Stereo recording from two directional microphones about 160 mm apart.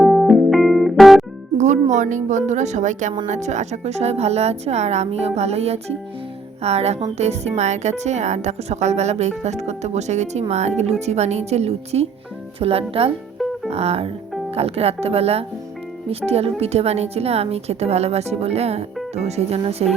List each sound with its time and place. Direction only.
0.0 s music: centre (ahead or behind)
1.5 s speech: 50° right (ahead or behind)
13.7 s music: 40° right (ahead or behind)
14.5 s speech: 40° right (ahead or behind)